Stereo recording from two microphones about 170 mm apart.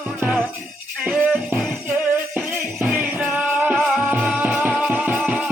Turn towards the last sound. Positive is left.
turn(degrees=-5)  # may be behind; listen again after turning